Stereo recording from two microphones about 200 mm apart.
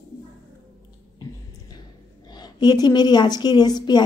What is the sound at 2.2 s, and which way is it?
A woman's voice, 20° left (ahead or behind).